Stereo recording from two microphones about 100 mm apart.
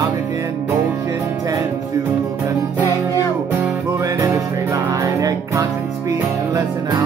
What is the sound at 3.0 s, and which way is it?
Music, 35° right (ahead or behind).